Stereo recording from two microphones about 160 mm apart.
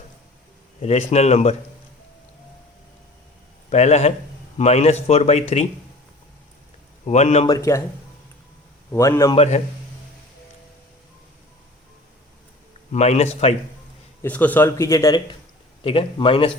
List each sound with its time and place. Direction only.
0.8 s speech: 40° left (ahead or behind)
3.7 s speech: 45° left (ahead or behind)
7.0 s speech: 45° left (ahead or behind)
7.4 s a man's voice: 20° left (ahead or behind)
8.9 s a man's voice: 20° left (ahead or behind)
9.3 s speech: 40° left (ahead or behind)
12.9 s speech: 45° left (ahead or behind)
14.2 s a man's voice: 10° left (ahead or behind)
15.8 s speech: 35° left (ahead or behind)